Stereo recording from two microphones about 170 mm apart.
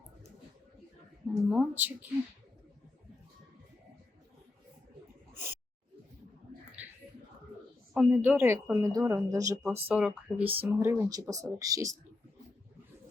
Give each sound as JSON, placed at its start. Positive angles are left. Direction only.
{"t": 1.5, "sound": "speech", "side_deg": -5}
{"t": 5.3, "sound": "gasp", "side_deg": -15}
{"t": 6.8, "sound": "a sound", "side_deg": -10}
{"t": 7.9, "sound": "speech", "side_deg": -10}